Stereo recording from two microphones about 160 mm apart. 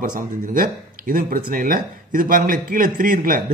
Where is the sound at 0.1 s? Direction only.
60° right (ahead or behind).